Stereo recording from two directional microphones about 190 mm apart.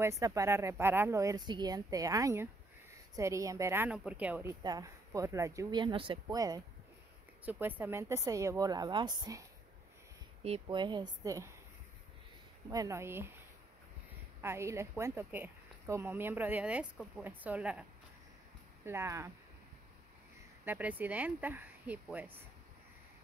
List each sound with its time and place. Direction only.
0.0 s a woman's voice: 15° right (ahead or behind)
12.6 s a woman's voice: 15° right (ahead or behind)
14.4 s a woman's voice: 15° right (ahead or behind)
18.9 s a woman's voice: 15° right (ahead or behind)
20.6 s a woman's voice: 10° right (ahead or behind)